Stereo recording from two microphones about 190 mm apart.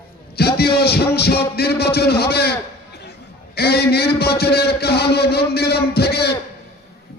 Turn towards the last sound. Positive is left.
turn(degrees=55)  # may be behind; listen again after turning